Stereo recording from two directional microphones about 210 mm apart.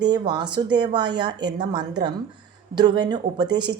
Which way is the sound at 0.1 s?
20° right (ahead or behind).